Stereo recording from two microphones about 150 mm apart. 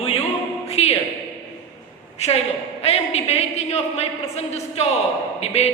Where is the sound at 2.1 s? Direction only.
45° left (ahead or behind).